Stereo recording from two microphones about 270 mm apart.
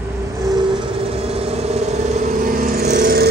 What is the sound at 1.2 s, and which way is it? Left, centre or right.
Vehicle, right.